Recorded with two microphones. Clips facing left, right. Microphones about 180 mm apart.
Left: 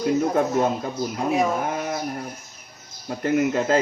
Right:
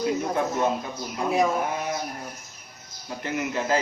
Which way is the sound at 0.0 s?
55° left (ahead or behind).